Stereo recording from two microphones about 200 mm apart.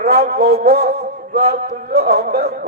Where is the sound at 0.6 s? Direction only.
50° right (ahead or behind).